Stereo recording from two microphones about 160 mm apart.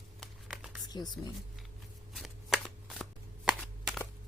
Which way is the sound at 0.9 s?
25° left (ahead or behind).